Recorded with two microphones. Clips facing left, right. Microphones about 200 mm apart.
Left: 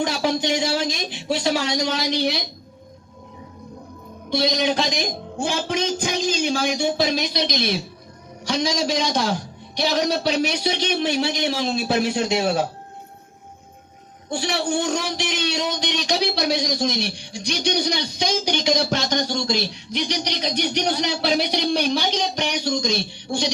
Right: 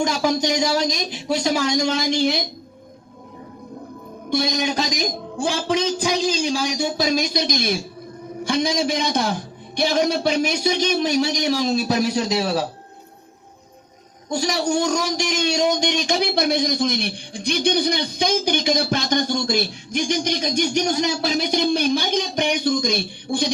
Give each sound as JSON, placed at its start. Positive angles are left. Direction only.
{"t": 0.0, "sound": "speech", "side_deg": -45}
{"t": 4.3, "sound": "a man's voice", "side_deg": -50}
{"t": 14.3, "sound": "a man's voice", "side_deg": -40}